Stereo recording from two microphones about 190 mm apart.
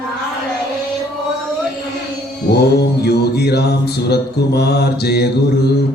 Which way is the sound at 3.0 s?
60° left (ahead or behind).